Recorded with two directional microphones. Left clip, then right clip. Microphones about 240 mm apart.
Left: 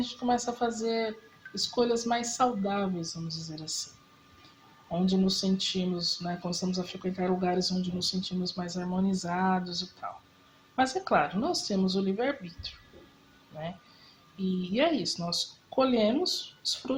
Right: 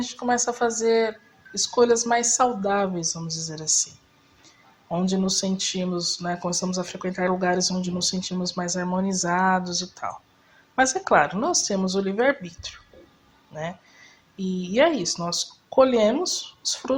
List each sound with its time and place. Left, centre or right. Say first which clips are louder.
0.0 s speech: right 5 dB; right
4.9 s speech: right 4 dB; right
14.7 s speech: right 8 dB; right